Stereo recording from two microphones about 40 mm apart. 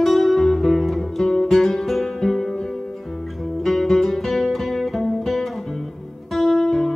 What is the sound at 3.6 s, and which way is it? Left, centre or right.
Music, centre.